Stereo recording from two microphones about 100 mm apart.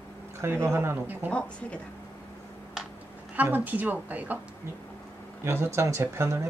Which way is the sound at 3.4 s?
15° right (ahead or behind).